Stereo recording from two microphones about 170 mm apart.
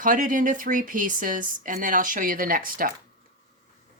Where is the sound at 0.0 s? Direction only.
50° right (ahead or behind).